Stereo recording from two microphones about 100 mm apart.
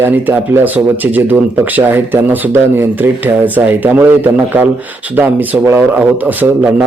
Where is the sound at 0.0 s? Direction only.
20° right (ahead or behind).